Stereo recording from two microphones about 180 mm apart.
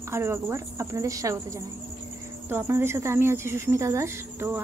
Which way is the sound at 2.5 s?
15° right (ahead or behind).